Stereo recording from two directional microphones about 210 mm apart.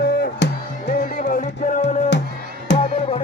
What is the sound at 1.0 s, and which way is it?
Music, 40° left (ahead or behind).